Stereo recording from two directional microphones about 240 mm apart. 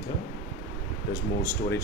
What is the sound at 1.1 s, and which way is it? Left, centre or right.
Speech, centre.